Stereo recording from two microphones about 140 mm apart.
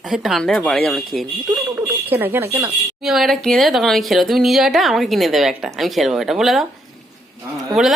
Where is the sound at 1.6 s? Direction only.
15° right (ahead or behind).